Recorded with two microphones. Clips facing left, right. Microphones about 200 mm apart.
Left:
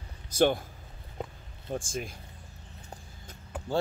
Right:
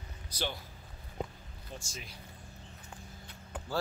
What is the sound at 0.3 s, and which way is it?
Speech, 50° left (ahead or behind).